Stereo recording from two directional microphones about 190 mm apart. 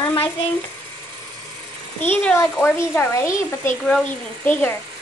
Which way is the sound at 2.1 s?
10° left (ahead or behind).